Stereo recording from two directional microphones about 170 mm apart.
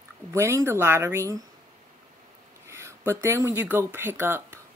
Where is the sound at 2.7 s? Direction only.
15° right (ahead or behind).